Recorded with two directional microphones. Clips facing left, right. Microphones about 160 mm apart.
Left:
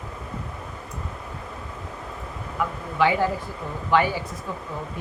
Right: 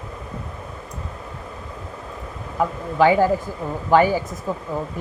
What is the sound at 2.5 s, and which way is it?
A woman's voice, 40° right (ahead or behind).